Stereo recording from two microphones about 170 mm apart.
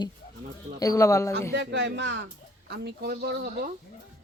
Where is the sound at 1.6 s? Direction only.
90° right.